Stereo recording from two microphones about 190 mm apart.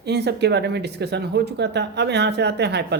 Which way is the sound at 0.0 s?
60° right (ahead or behind).